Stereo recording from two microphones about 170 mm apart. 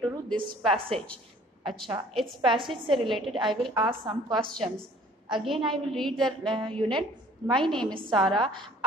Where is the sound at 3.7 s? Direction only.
25° right (ahead or behind).